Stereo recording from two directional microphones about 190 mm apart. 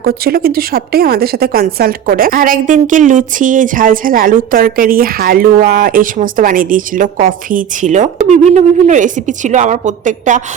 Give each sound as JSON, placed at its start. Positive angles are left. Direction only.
{"t": 0.0, "sound": "a woman's voice", "side_deg": -55}